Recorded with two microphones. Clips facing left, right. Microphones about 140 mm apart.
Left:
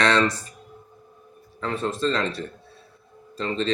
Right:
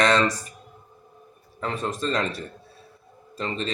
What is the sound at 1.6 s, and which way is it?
Speech, 15° right (ahead or behind).